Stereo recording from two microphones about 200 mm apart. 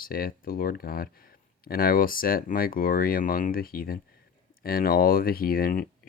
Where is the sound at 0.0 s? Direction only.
45° left (ahead or behind).